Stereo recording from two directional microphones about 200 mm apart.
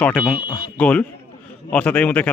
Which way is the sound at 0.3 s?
25° left (ahead or behind).